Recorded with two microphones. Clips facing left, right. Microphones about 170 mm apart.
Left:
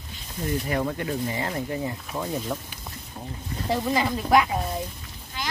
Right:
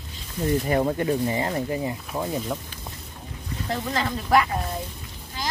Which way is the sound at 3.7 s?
10° left (ahead or behind).